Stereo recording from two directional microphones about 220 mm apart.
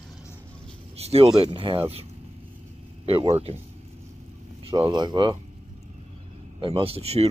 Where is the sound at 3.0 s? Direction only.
25° right (ahead or behind).